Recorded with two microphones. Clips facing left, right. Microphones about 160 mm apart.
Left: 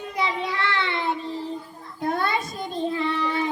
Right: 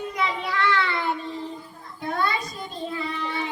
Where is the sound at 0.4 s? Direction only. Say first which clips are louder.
Right 2 dB; 25° left (ahead or behind).